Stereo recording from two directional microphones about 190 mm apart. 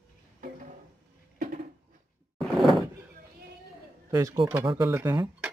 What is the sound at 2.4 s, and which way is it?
Sliding door, centre (ahead or behind).